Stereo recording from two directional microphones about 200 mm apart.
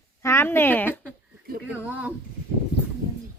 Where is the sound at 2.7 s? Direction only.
55° left (ahead or behind).